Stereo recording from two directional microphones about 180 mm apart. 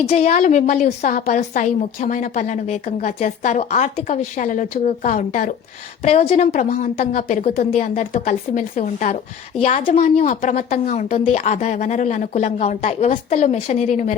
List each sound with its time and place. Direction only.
0.1 s a woman's voice: 35° left (ahead or behind)
6.0 s a woman's voice: 35° left (ahead or behind)
6.7 s a woman's voice: 50° left (ahead or behind)
9.6 s a woman's voice: 35° left (ahead or behind)